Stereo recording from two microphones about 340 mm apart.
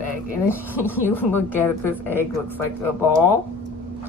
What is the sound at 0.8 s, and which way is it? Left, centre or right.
Speech, centre.